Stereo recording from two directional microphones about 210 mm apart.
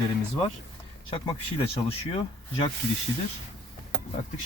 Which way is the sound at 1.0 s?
25° left (ahead or behind).